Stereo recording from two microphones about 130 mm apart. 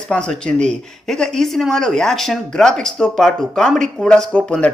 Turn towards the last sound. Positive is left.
turn(degrees=5)  # may be behind; listen again after turning